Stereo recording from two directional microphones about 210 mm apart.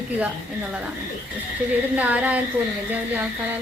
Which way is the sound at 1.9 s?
5° right (ahead or behind).